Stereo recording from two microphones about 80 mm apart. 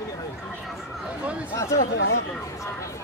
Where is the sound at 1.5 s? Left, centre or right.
Left.